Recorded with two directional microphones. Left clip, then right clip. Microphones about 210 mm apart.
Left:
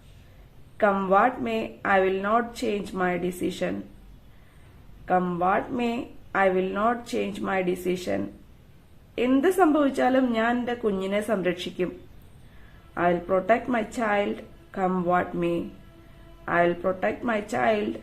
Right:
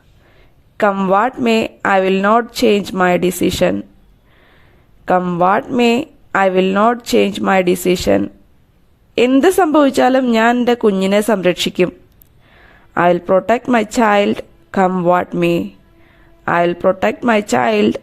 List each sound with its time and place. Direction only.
0.8 s speech: 50° right (ahead or behind)
5.0 s speech: 50° right (ahead or behind)
9.3 s speech: 45° right (ahead or behind)
12.9 s speech: 50° right (ahead or behind)